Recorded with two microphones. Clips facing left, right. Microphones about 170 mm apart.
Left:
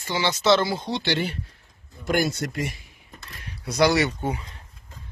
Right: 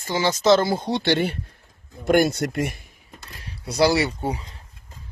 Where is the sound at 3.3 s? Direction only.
30° right (ahead or behind).